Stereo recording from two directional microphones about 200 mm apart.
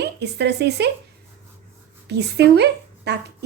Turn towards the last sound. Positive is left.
turn(degrees=-55)  # may be behind; listen again after turning